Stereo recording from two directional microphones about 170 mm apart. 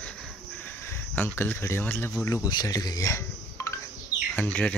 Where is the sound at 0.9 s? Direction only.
10° left (ahead or behind).